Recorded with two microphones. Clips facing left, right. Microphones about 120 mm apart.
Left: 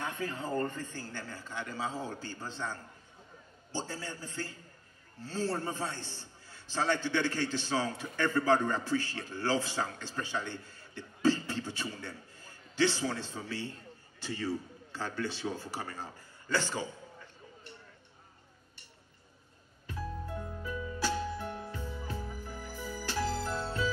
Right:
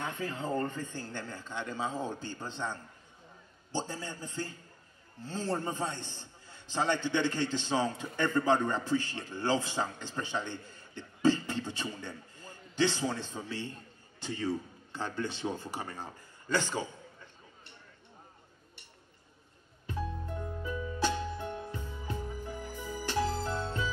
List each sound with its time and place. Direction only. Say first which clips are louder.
0.0 s a man's voice: right 1 dB; 20° right (ahead or behind)
19.9 s music: right 2 dB; 20° right (ahead or behind)